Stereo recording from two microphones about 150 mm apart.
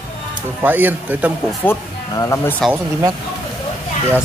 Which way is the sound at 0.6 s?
10° right (ahead or behind).